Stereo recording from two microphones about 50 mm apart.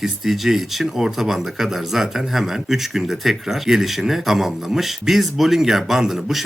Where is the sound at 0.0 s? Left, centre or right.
Centre.